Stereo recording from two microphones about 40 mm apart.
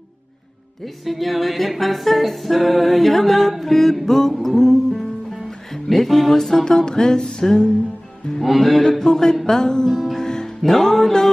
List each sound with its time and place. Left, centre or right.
1.0 s music: centre
8.4 s music: centre
8.8 s a sound: centre
9.9 s music: centre
10.2 s music: centre